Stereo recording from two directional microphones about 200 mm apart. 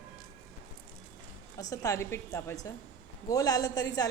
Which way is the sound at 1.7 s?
15° left (ahead or behind).